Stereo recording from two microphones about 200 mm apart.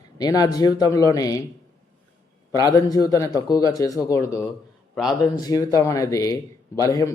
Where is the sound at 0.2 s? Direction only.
20° left (ahead or behind).